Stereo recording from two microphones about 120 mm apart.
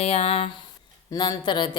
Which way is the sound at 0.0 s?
60° left (ahead or behind).